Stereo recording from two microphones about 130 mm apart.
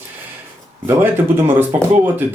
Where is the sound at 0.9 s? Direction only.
15° right (ahead or behind).